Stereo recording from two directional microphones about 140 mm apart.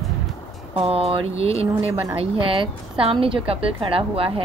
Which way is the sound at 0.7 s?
45° right (ahead or behind).